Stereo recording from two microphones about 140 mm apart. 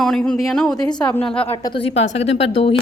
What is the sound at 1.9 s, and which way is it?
Speech, 50° left (ahead or behind).